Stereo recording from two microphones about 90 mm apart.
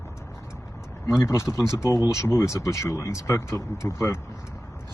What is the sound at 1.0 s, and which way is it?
Speech, 30° left (ahead or behind).